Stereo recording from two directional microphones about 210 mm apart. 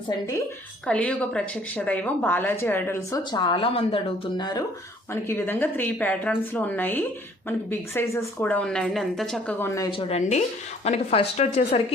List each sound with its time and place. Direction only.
0.9 s a woman's voice: 5° left (ahead or behind)
5.3 s a woman's voice: 10° left (ahead or behind); by 11.9 s 30° left (ahead or behind)